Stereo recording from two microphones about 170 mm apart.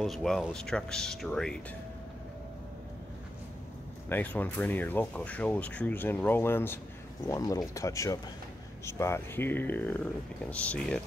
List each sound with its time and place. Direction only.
0.0 s speech: centre (ahead or behind)
4.1 s speech: 10° left (ahead or behind)